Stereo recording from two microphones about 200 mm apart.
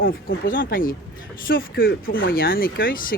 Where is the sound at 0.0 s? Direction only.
45° left (ahead or behind).